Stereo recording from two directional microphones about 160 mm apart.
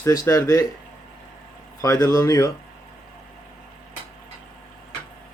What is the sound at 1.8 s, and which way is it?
Speech, 20° left (ahead or behind).